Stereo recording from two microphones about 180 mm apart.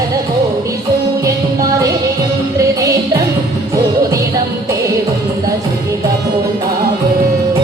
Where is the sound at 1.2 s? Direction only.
20° right (ahead or behind).